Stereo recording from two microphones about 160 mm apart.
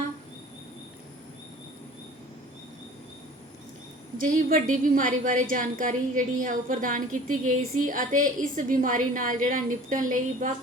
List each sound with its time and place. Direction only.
4.4 s a woman's voice: 60° right (ahead or behind)